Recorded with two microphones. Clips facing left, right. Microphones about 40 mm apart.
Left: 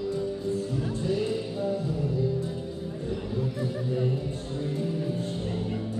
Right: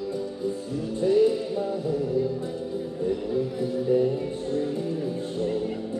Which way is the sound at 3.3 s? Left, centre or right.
Centre.